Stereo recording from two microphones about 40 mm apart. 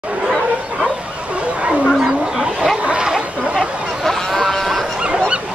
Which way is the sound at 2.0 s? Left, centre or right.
Centre.